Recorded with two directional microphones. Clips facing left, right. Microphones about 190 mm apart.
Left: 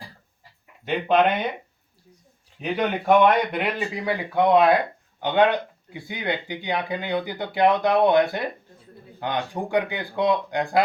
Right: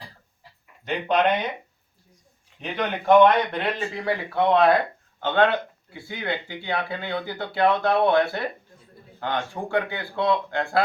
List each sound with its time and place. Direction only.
0.9 s speech: 5° left (ahead or behind)
2.6 s speech: 5° left (ahead or behind)